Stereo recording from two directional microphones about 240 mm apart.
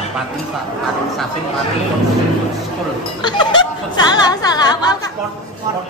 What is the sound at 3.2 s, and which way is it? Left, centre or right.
Speech, centre.